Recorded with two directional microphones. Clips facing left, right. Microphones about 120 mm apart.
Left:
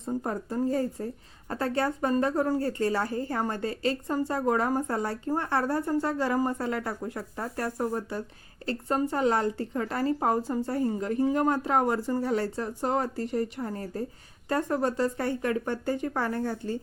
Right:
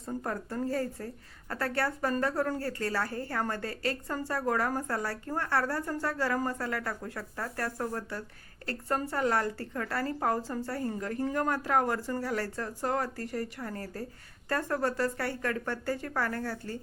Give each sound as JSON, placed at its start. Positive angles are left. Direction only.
{"t": 0.0, "sound": "a woman's voice", "side_deg": 20}